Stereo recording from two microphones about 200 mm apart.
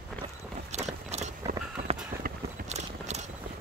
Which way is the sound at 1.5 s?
35° right (ahead or behind).